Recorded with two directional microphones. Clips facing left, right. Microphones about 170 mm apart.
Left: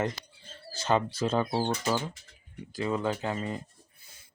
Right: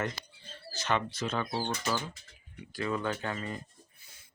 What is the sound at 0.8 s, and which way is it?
Speech, 30° left (ahead or behind).